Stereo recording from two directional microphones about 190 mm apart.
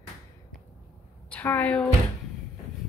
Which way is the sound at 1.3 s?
10° left (ahead or behind).